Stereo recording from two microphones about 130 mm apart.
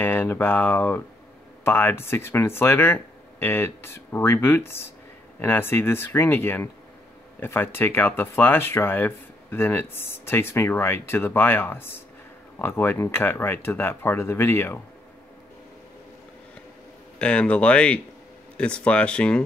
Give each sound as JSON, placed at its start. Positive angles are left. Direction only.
{"t": 0.0, "sound": "speech", "side_deg": 15}
{"t": 17.2, "sound": "speech", "side_deg": 10}